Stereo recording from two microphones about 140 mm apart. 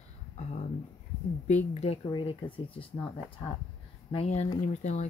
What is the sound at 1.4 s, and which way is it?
Speech, 50° left (ahead or behind).